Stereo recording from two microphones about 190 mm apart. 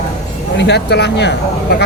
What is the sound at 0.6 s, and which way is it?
Speech, 60° left (ahead or behind).